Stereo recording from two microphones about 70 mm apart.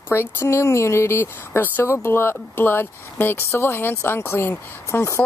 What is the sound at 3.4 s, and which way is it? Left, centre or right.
Speech, left.